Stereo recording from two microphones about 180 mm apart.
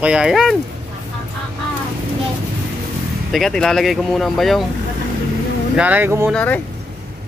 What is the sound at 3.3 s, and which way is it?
Speech, centre (ahead or behind).